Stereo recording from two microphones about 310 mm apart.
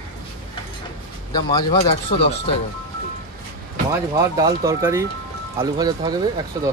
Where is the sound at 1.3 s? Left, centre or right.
Centre.